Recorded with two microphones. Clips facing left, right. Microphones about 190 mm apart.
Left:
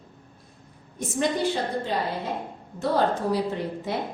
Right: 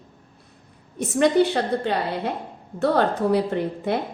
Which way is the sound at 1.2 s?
65° right (ahead or behind).